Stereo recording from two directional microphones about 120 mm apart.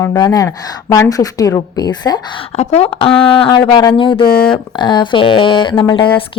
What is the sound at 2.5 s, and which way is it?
A woman's voice, 60° left (ahead or behind).